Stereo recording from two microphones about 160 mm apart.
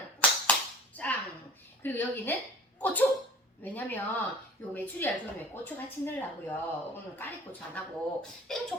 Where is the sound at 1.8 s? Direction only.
10° left (ahead or behind).